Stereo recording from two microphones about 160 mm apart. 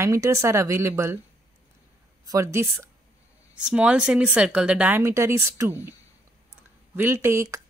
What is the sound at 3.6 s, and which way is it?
A woman's voice, 5° right (ahead or behind).